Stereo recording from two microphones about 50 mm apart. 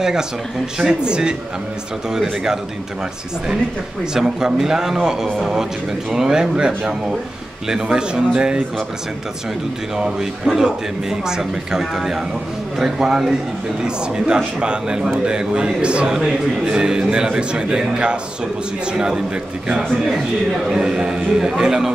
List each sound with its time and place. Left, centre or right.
0.0 s a man's voice: centre
4.0 s a man's voice: centre
9.9 s a man's voice: centre